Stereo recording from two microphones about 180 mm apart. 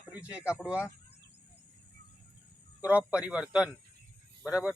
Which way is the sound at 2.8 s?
10° right (ahead or behind).